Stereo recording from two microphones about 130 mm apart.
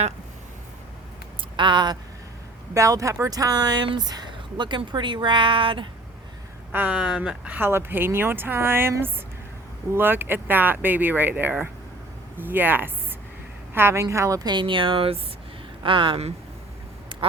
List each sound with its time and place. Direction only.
1.5 s speech: 35° right (ahead or behind)
2.7 s speech: 25° right (ahead or behind)
6.7 s speech: 10° right (ahead or behind); by 16.3 s 45° right (ahead or behind)
17.1 s quack: 40° right (ahead or behind)